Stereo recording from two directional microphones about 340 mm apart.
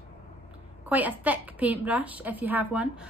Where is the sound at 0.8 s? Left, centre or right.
Centre.